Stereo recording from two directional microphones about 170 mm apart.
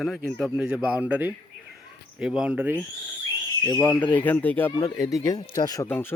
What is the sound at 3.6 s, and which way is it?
Speech, 20° left (ahead or behind).